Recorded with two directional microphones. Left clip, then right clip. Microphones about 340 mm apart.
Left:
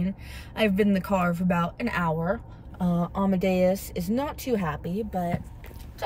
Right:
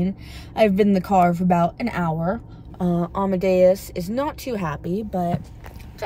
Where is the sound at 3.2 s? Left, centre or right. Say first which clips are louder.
Right 7 dB; right.